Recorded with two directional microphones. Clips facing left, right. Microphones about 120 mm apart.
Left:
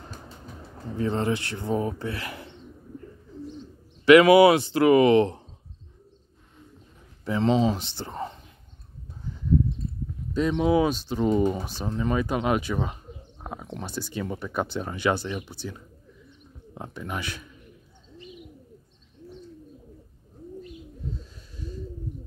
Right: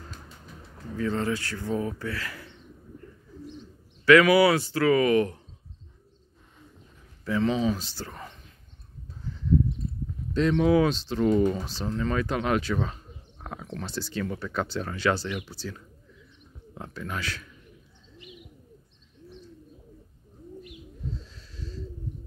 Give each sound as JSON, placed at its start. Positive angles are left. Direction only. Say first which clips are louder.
{"t": 0.8, "sound": "speech", "louder": "left 2 dB", "side_deg": 25}
{"t": 4.0, "sound": "speech", "louder": "left 4 dB", "side_deg": 20}
{"t": 7.2, "sound": "speech", "louder": "left 3 dB", "side_deg": 25}
{"t": 10.3, "sound": "speech", "louder": "right 1 dB", "side_deg": 10}
{"t": 21.2, "sound": "wheeze", "louder": "left 2 dB", "side_deg": 15}